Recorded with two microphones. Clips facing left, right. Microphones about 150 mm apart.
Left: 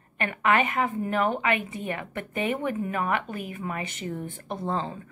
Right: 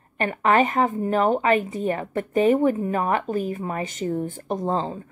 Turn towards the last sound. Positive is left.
turn(degrees=-35)  # may be behind; listen again after turning